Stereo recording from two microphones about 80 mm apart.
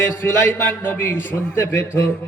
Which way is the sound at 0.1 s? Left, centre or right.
Left.